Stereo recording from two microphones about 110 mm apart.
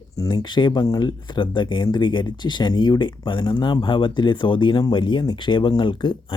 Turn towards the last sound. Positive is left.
turn(degrees=50)  # may be behind; listen again after turning